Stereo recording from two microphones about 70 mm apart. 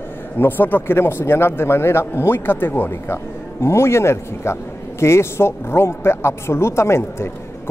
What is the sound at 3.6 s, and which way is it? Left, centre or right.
A man's voice, left.